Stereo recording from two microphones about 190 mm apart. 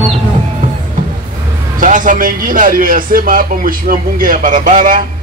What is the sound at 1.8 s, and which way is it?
A man's voice, 45° right (ahead or behind).